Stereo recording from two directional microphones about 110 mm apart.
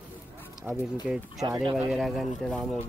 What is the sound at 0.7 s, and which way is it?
Speech, 10° right (ahead or behind).